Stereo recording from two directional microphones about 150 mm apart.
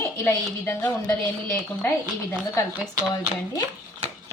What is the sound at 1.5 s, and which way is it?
Speech, 20° left (ahead or behind).